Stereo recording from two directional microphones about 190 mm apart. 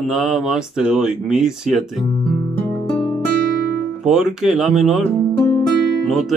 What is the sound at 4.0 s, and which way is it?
Speech, centre (ahead or behind).